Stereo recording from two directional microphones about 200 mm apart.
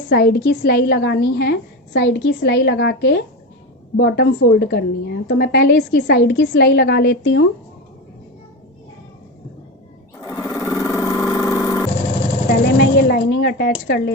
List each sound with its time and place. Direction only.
0.1 s a woman's voice: 50° left (ahead or behind)
10.2 s vehicle: 15° left (ahead or behind)
12.7 s speech: 55° left (ahead or behind)